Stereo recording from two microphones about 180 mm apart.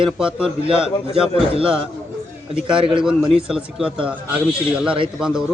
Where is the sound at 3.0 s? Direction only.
5° right (ahead or behind).